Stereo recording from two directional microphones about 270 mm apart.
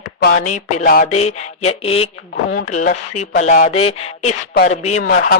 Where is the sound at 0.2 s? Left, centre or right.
Left.